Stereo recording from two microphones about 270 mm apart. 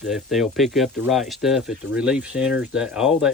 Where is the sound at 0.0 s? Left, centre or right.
Centre.